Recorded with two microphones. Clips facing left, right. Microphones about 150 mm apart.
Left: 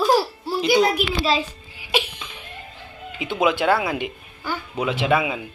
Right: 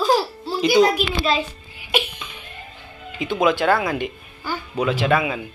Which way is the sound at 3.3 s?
10° left (ahead or behind).